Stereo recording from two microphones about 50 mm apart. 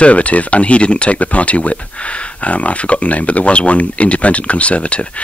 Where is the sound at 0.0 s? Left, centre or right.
Left.